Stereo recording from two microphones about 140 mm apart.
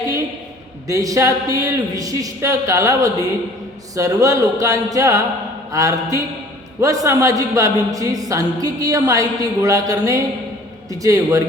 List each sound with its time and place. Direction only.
0.9 s speech: 25° right (ahead or behind)